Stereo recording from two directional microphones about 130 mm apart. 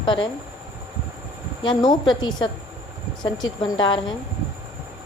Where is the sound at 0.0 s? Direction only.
40° left (ahead or behind).